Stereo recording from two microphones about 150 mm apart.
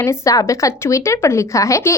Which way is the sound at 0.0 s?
20° left (ahead or behind).